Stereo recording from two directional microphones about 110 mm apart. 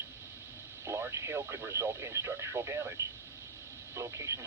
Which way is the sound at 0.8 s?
25° right (ahead or behind).